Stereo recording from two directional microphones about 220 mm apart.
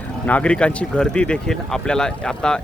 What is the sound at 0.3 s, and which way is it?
Speech, 5° left (ahead or behind).